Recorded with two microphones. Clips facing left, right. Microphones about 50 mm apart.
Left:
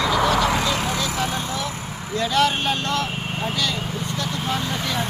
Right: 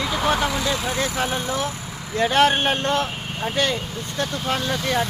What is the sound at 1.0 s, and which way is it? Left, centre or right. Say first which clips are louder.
Speech: right 1 dB; right.